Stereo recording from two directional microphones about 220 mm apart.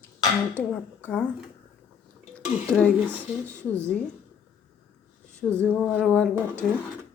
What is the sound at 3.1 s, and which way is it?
A woman's voice, 5° left (ahead or behind).